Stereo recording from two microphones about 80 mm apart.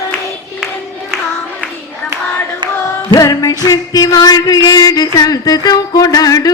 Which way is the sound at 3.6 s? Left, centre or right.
Left.